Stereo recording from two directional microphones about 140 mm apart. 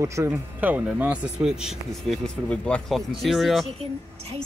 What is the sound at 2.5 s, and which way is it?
Speech, 10° left (ahead or behind).